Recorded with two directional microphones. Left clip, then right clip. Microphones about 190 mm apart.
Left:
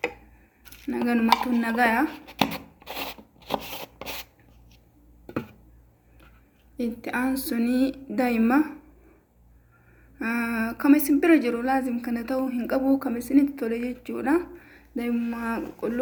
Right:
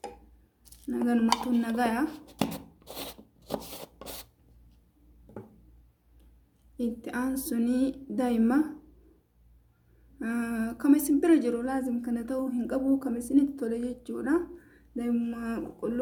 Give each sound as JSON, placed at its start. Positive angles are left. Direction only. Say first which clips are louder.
{"t": 0.9, "sound": "a woman's voice", "louder": "left 5 dB", "side_deg": -30}
{"t": 2.6, "sound": "a sound", "louder": "left 7 dB", "side_deg": -5}
{"t": 6.7, "sound": "a woman's voice", "louder": "left 5 dB", "side_deg": -30}
{"t": 10.2, "sound": "a woman's voice", "louder": "left 6 dB", "side_deg": -25}